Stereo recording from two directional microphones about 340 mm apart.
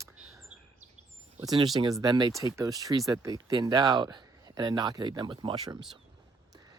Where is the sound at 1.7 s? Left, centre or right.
Centre.